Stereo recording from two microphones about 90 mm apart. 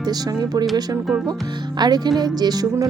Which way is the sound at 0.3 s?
40° right (ahead or behind).